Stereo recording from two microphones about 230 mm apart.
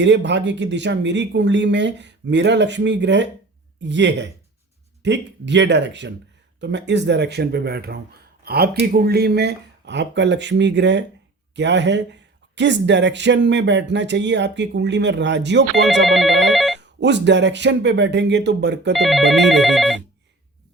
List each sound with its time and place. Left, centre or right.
0.0 s speech: right
16.0 s telephone bell ringing: centre
16.8 s speech: right
18.9 s telephone bell ringing: centre